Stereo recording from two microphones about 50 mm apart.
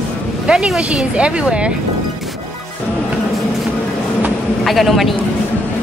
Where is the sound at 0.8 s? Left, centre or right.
Right.